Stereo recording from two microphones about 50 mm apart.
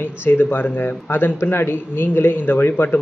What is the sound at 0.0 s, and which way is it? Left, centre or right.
Speech, left.